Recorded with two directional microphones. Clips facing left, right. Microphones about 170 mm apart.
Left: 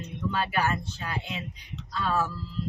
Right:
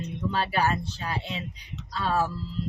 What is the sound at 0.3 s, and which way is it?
A woman's voice, 35° right (ahead or behind).